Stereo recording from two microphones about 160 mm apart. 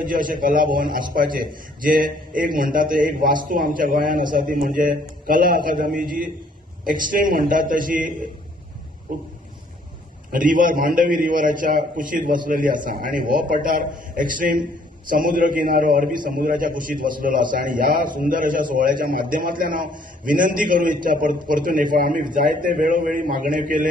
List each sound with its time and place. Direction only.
0.0 s a man's voice: 60° right (ahead or behind)
10.3 s a man's voice: 60° right (ahead or behind)